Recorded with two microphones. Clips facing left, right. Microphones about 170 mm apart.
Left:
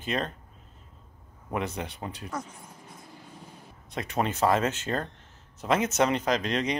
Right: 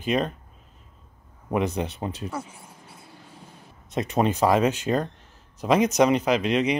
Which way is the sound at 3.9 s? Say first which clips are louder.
Right 6 dB; 20° right (ahead or behind).